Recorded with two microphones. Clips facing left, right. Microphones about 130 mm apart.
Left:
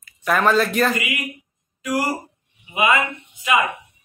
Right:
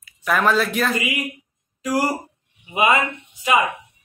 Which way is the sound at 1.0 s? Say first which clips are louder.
Right 2 dB; 30° right (ahead or behind).